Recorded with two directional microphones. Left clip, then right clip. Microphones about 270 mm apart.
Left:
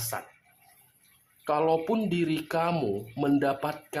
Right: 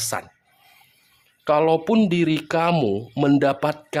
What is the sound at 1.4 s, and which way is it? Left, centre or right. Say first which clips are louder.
Speech: right 7 dB; right.